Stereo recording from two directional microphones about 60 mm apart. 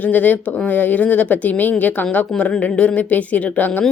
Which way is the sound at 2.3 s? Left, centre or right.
Centre.